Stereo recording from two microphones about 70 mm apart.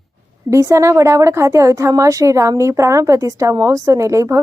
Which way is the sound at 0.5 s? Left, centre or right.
Right.